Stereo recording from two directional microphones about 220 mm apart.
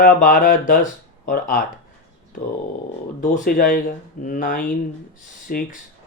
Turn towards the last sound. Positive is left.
turn(degrees=40)  # may be behind; listen again after turning